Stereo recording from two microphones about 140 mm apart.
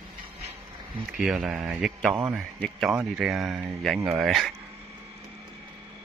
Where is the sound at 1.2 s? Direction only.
5° right (ahead or behind).